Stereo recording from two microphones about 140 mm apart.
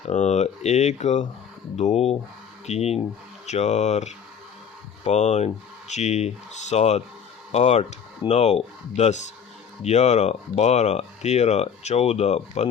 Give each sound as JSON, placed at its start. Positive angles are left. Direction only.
{"t": 0.1, "sound": "speech", "side_deg": 55}